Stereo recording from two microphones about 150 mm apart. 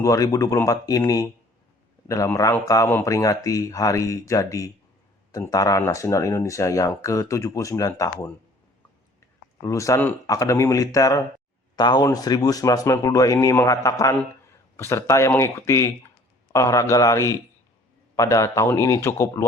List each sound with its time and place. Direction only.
0.0 s speech: 20° left (ahead or behind)
9.6 s speech: 20° left (ahead or behind)